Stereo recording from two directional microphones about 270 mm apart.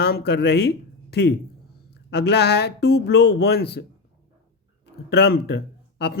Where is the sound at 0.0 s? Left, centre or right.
Left.